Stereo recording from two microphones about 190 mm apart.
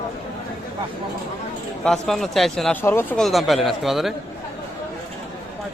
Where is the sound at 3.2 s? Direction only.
Centre (ahead or behind).